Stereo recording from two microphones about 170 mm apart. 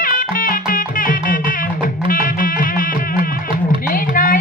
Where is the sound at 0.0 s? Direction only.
55° left (ahead or behind).